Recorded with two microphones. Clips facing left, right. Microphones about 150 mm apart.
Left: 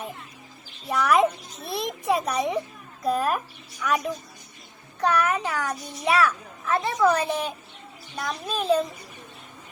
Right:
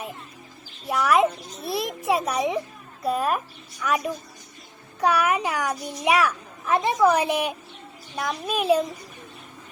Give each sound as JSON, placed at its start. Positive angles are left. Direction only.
{"t": 0.9, "sound": "a child's voice", "side_deg": 0}